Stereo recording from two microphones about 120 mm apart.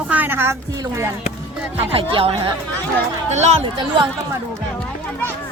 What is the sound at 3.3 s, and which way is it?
Speech, 70° right (ahead or behind).